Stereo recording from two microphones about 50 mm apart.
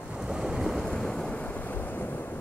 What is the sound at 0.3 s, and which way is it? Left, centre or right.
Waves, centre.